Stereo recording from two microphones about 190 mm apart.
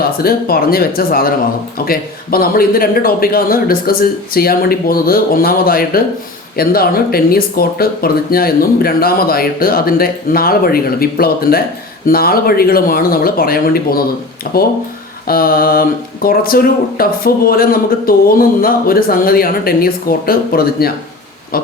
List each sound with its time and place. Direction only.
0.0 s speech: 55° left (ahead or behind)